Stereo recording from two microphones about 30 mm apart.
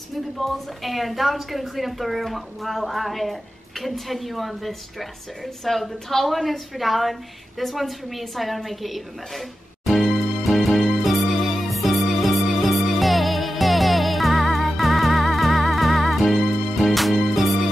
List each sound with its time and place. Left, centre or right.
0.4 s a woman's voice: centre
9.8 s music: centre